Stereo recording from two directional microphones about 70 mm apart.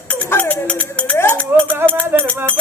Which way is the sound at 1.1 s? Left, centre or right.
Left.